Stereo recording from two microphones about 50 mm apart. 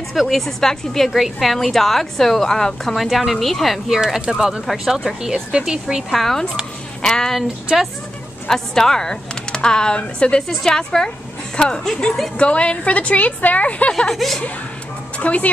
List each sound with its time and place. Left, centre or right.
0.1 s speech: centre
4.0 s a woman's voice: centre
4.6 s a woman's voice: centre
6.0 s speech: centre
8.5 s speech: centre
10.5 s a woman's voice: centre; by 13.9 s left
14.1 s speech: centre
15.1 s speech: left